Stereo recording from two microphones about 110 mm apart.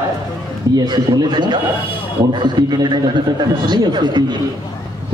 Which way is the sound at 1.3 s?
40° right (ahead or behind).